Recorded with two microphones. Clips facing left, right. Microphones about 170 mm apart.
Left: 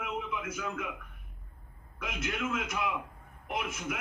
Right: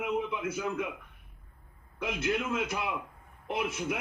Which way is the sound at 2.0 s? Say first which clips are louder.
Right 4 dB; 30° right (ahead or behind).